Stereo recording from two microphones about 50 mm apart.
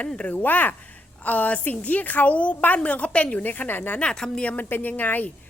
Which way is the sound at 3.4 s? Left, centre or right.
Left.